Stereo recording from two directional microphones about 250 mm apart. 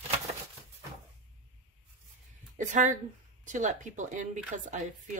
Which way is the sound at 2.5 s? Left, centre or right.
Right.